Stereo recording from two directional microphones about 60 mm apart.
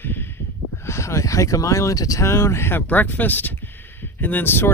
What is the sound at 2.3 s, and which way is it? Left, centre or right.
Speech, left.